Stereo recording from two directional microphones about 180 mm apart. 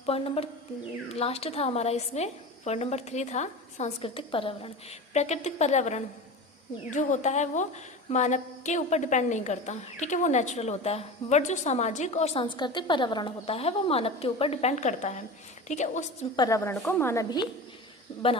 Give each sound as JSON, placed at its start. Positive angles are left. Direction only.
{"t": 0.0, "sound": "a woman's voice", "side_deg": 35}
{"t": 16.3, "sound": "a woman's voice", "side_deg": 20}
{"t": 16.7, "sound": "speech", "side_deg": 5}
{"t": 17.0, "sound": "a woman's voice", "side_deg": 15}